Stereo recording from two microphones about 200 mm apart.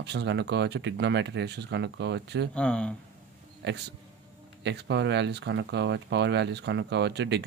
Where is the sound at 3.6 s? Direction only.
60° right (ahead or behind).